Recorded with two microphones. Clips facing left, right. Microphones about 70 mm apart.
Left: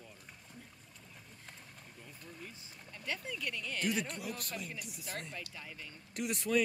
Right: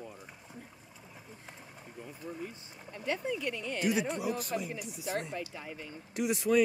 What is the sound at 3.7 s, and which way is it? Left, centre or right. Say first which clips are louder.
Speech: right 5 dB; centre.